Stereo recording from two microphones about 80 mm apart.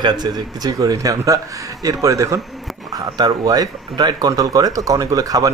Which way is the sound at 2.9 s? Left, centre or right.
Right.